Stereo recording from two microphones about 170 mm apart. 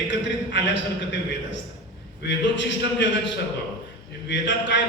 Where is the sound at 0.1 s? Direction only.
90° left.